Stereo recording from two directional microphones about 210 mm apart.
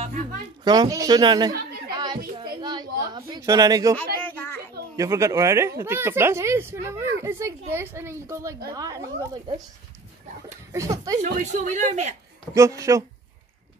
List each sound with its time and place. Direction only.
0.7 s speech: 20° right (ahead or behind)
1.9 s children playing: 20° right (ahead or behind)
2.3 s a sound: 20° right (ahead or behind)
4.2 s children playing: 10° left (ahead or behind)
4.9 s speech: 15° right (ahead or behind)
10.7 s speech: 15° right (ahead or behind)
11.1 s speech: 35° right (ahead or behind)
12.5 s speech: 15° right (ahead or behind)